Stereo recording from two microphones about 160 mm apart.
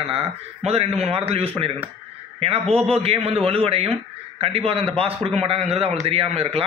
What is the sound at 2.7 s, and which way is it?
A man's voice, 40° right (ahead or behind).